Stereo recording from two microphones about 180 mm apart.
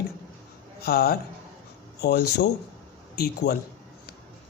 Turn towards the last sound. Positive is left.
turn(degrees=60)  # may be behind; listen again after turning